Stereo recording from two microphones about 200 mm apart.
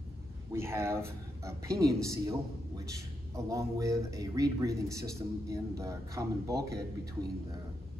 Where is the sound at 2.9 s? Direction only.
15° right (ahead or behind).